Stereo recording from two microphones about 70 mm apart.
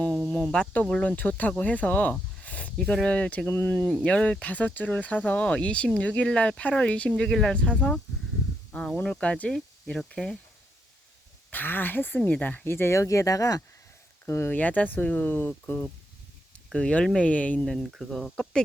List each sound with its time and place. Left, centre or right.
0.5 s speech: centre
2.4 s a sound: centre
2.7 s speech: centre
11.5 s speech: left
14.3 s speech: left
14.5 s speech: left
16.7 s speech: centre
18.1 s speech: centre